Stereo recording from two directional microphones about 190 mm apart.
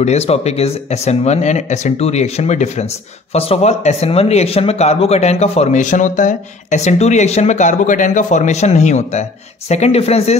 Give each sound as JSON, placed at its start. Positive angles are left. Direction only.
{"t": 0.0, "sound": "speech", "side_deg": 35}